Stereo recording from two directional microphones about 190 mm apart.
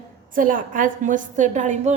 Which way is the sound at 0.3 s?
45° right (ahead or behind).